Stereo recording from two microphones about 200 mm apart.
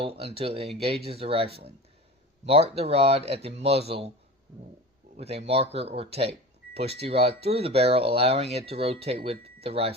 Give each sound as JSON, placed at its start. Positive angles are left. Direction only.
{"t": 0.0, "sound": "speech", "side_deg": -30}
{"t": 2.5, "sound": "speech", "side_deg": -30}
{"t": 5.1, "sound": "speech", "side_deg": -30}